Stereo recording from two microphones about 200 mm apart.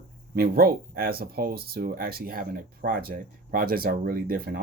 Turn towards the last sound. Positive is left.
turn(degrees=-50)  # may be behind; listen again after turning